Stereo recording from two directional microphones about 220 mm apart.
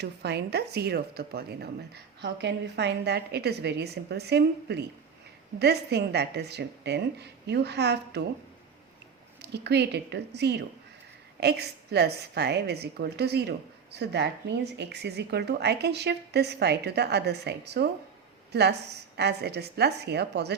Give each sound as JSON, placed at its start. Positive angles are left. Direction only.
{"t": 0.0, "sound": "a woman's voice", "side_deg": -50}
{"t": 9.4, "sound": "a woman's voice", "side_deg": -50}